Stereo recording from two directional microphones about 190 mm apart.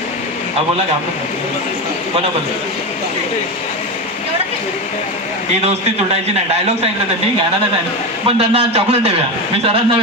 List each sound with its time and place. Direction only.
8.3 s a man's voice: 30° right (ahead or behind)